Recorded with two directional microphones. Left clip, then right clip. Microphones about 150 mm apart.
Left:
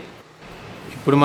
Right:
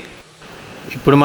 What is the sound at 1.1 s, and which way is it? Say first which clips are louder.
Speech: right 6 dB; 45° right (ahead or behind).